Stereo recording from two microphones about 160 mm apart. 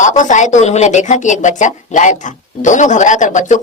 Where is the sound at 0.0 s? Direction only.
50° left (ahead or behind).